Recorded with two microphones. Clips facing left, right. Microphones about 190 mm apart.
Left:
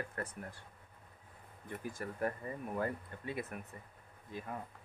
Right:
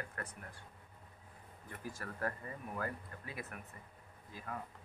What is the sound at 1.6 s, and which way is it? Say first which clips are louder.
Speech: left 4 dB; 20° left (ahead or behind).